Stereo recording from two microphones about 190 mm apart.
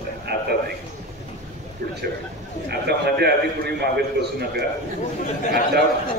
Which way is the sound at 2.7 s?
60° right (ahead or behind).